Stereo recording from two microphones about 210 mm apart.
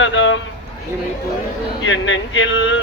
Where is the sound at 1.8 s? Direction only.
65° left (ahead or behind).